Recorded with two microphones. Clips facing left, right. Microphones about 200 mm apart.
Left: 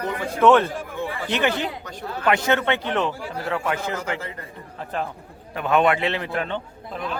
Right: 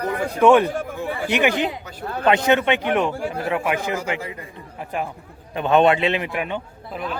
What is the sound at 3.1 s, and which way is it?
Speech, 55° right (ahead or behind).